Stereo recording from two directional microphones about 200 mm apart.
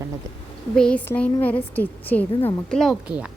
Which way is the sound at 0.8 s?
5° left (ahead or behind).